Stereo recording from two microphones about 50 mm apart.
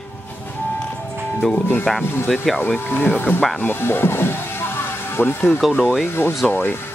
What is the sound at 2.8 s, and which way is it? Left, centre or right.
Speech, left.